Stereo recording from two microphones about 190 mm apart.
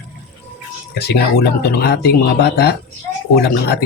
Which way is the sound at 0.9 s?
60° left (ahead or behind).